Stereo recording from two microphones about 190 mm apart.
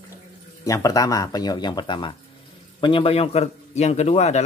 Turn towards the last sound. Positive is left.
turn(degrees=35)  # may be behind; listen again after turning